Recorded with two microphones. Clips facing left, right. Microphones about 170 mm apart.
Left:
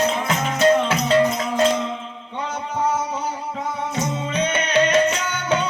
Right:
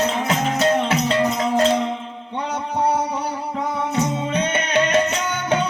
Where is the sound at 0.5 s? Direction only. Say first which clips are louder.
Left 4 dB; 60° right (ahead or behind).